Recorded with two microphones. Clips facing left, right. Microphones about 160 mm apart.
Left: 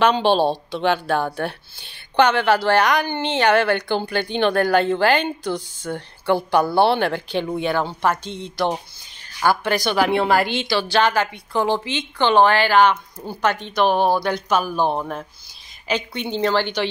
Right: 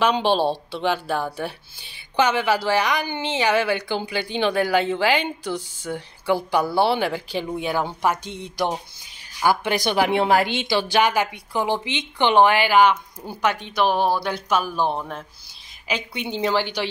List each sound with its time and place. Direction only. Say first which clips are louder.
0.0 s a woman's voice: left 3 dB; 5° right (ahead or behind)
7.8 s a woman's voice: left 1 dB; 15° right (ahead or behind); by 15.2 s 5° left (ahead or behind)
15.9 s speech: left 3 dB; 10° right (ahead or behind)